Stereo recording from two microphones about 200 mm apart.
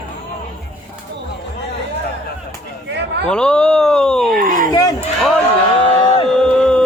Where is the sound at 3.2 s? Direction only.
5° left (ahead or behind).